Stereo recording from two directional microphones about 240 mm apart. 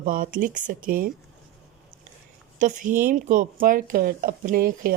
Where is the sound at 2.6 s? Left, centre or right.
Right.